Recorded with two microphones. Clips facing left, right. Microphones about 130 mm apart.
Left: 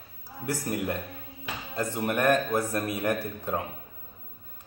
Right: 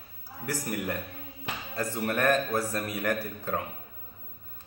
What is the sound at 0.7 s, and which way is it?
A man's voice, 20° left (ahead or behind).